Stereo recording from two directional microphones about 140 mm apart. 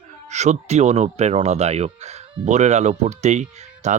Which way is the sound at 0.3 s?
55° right (ahead or behind).